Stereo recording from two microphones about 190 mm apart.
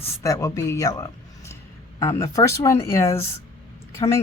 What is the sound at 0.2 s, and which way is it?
Speech, 15° left (ahead or behind).